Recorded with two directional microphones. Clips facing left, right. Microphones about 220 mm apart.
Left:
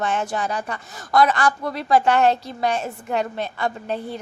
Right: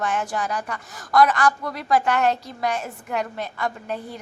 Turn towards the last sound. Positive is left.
turn(degrees=30)  # may be behind; listen again after turning